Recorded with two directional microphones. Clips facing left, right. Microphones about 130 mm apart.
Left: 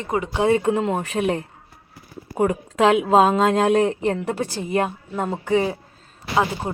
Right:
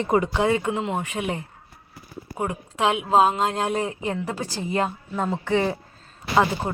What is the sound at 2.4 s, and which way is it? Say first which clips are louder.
Speech: left 7 dB; 50° left (ahead or behind).